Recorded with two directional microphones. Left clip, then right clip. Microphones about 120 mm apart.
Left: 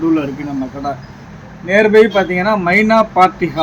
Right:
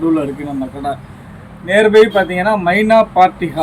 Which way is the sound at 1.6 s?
15° right (ahead or behind).